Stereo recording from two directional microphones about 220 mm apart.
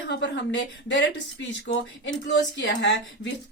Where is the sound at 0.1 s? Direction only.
55° left (ahead or behind).